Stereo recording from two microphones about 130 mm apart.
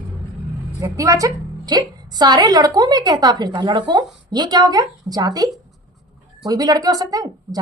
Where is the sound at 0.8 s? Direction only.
25° right (ahead or behind).